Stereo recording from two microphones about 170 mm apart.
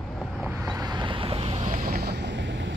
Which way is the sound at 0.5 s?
20° right (ahead or behind).